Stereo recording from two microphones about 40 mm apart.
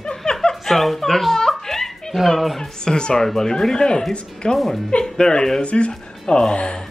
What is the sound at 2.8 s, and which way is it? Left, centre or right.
Speech, centre.